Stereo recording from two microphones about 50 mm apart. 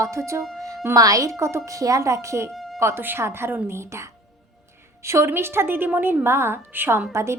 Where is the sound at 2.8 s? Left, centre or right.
Right.